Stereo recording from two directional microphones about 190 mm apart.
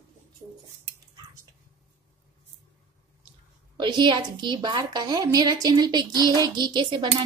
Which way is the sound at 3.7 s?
25° right (ahead or behind).